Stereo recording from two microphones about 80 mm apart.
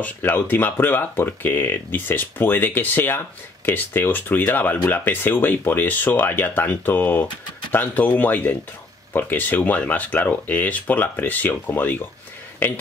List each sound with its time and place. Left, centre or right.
0.0 s speech: left